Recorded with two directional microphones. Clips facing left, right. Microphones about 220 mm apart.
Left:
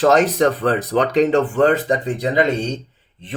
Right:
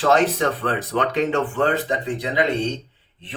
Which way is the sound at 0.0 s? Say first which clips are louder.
Left 4 dB; 40° left (ahead or behind).